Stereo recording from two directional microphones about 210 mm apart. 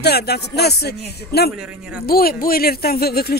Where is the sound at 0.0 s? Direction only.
50° left (ahead or behind).